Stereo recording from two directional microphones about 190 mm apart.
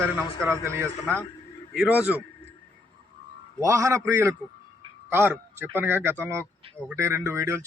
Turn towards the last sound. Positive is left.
turn(degrees=-15)  # may be behind; listen again after turning